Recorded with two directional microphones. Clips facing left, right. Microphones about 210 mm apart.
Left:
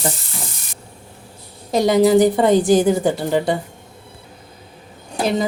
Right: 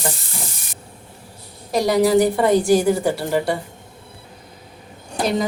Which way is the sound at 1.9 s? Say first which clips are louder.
Left 3 dB; 20° left (ahead or behind).